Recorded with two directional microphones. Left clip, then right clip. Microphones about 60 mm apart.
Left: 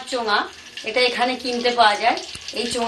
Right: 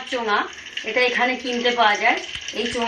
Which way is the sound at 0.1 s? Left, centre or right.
Centre.